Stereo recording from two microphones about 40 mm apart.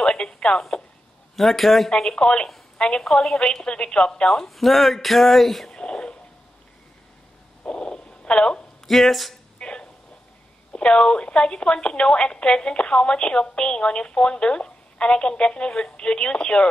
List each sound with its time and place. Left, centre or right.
0.0 s radio: centre
1.3 s speech: centre
2.0 s a woman's voice: left
4.3 s speech: centre
5.7 s a sound: left
7.6 s a sound: left
8.8 s speech: centre
9.6 s a sound: left
10.7 s a woman's voice: left